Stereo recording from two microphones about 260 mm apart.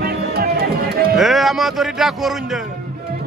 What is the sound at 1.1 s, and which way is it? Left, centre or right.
Speech, centre.